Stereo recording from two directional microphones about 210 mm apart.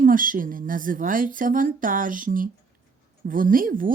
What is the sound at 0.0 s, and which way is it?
Speech, 40° right (ahead or behind).